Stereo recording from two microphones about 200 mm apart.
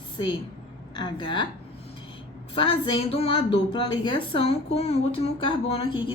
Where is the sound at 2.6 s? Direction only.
25° left (ahead or behind).